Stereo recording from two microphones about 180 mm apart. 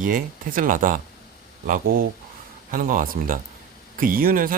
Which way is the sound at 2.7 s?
50° right (ahead or behind).